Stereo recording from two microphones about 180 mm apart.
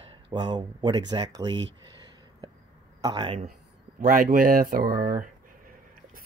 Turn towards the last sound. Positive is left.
turn(degrees=-50)  # may be behind; listen again after turning